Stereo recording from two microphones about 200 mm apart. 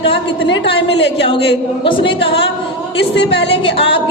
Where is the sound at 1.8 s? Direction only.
25° left (ahead or behind).